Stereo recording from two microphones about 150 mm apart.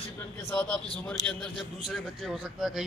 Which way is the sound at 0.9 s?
5° left (ahead or behind).